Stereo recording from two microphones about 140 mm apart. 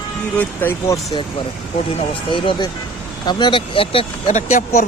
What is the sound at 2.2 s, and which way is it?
Speech, 35° left (ahead or behind).